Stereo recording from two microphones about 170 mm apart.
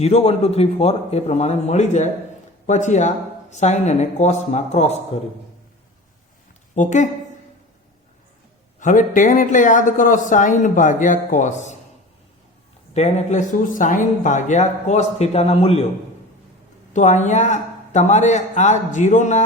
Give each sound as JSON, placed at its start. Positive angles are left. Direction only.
{"t": 0.0, "sound": "a man's voice", "side_deg": 40}
{"t": 6.7, "sound": "speech", "side_deg": 45}
{"t": 8.8, "sound": "speech", "side_deg": 50}
{"t": 12.9, "sound": "speech", "side_deg": 40}
{"t": 16.9, "sound": "speech", "side_deg": 45}